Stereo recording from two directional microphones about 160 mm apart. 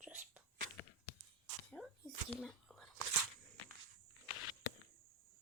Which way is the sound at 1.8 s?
Centre (ahead or behind).